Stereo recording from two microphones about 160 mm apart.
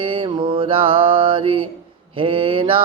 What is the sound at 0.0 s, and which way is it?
Mantra, 35° right (ahead or behind).